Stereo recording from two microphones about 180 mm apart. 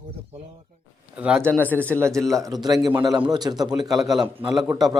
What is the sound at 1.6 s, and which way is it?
Speech, 10° left (ahead or behind).